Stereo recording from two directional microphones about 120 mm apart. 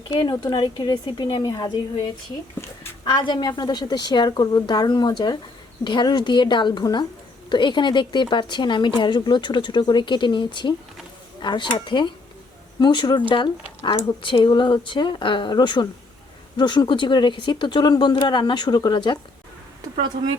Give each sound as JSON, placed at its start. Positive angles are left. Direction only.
{"t": 0.1, "sound": "speech", "side_deg": 40}
{"t": 3.0, "sound": "speech", "side_deg": 40}